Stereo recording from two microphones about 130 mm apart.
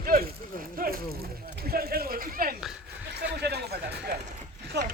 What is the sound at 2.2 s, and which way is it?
Speech, 90° right.